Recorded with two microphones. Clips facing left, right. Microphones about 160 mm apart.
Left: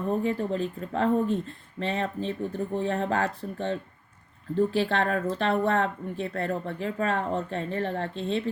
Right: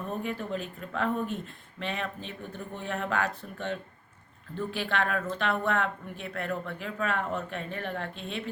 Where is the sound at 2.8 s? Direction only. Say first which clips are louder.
Left 3 dB; 25° left (ahead or behind).